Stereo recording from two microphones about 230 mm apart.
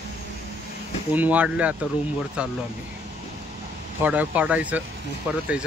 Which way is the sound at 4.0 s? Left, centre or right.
Centre.